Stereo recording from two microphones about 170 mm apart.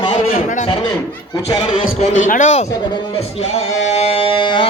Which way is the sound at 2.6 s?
25° left (ahead or behind).